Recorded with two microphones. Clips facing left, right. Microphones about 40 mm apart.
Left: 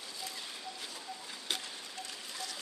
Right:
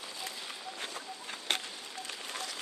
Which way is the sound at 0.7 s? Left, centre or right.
Right.